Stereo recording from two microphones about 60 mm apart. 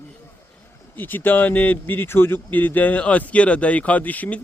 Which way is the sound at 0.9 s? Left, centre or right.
Left.